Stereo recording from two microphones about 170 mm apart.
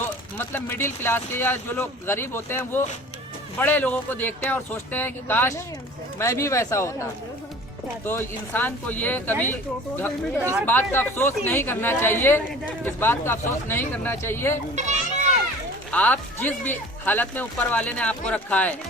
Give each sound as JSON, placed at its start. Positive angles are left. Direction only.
{"t": 0.3, "sound": "a woman's voice", "side_deg": 10}
{"t": 10.4, "sound": "speech", "side_deg": -15}
{"t": 10.7, "sound": "a woman's voice", "side_deg": 10}
{"t": 15.9, "sound": "a woman's voice", "side_deg": 10}